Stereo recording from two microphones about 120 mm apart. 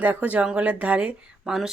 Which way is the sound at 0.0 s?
10° right (ahead or behind).